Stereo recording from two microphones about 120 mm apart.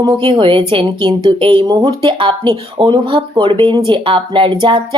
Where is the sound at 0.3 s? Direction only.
45° right (ahead or behind).